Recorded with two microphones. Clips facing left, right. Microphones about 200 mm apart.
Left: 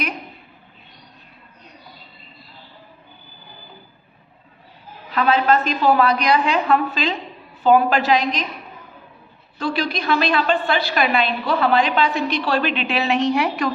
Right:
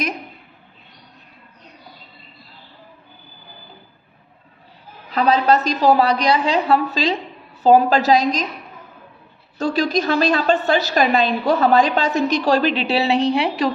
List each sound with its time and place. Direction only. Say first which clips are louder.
5.1 s a woman's voice: right 1 dB; 40° right (ahead or behind)
9.6 s a woman's voice: right 4 dB; 45° right (ahead or behind)